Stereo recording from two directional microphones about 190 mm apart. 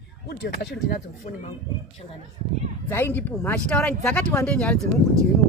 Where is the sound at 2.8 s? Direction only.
10° left (ahead or behind).